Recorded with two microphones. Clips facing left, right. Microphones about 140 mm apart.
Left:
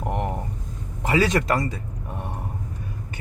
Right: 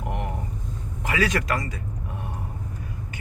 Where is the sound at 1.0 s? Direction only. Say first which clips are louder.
Left 4 dB; 30° left (ahead or behind).